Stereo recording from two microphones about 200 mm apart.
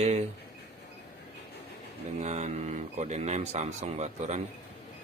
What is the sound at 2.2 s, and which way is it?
Speech, 35° right (ahead or behind).